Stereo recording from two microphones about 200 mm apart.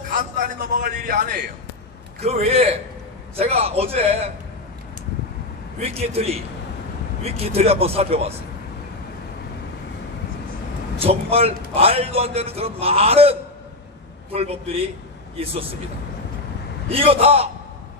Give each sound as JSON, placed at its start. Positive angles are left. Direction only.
{"t": 0.1, "sound": "a sound", "side_deg": -45}
{"t": 2.2, "sound": "a man's voice", "side_deg": -30}
{"t": 5.8, "sound": "a man's voice", "side_deg": -30}
{"t": 7.3, "sound": "a man's voice", "side_deg": -30}
{"t": 11.0, "sound": "a man's voice", "side_deg": -30}
{"t": 16.9, "sound": "a man's voice", "side_deg": -30}